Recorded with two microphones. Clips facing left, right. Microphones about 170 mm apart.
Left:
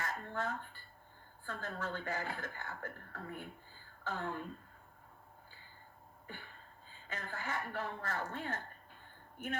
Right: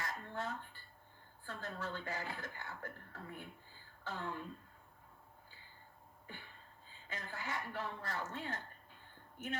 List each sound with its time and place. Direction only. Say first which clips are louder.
0.0 s dishes: left 3 dB; 50° left (ahead or behind)
1.5 s speech: left 2 dB; 50° left (ahead or behind)
6.2 s a sound: left 3 dB; 50° left (ahead or behind)
7.1 s speech: left 2 dB; 50° left (ahead or behind)